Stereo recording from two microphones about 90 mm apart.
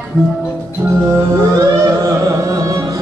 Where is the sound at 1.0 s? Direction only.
25° right (ahead or behind).